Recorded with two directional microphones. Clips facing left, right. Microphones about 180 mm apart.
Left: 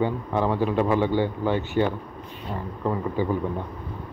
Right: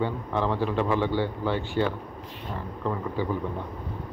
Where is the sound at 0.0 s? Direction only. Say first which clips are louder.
Left 3 dB; 15° left (ahead or behind).